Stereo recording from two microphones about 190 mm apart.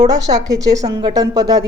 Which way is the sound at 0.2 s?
20° right (ahead or behind).